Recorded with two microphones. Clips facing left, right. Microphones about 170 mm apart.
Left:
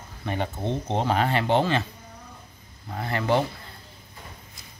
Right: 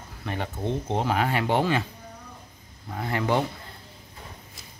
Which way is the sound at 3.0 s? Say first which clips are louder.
Left 1 dB; 15° right (ahead or behind).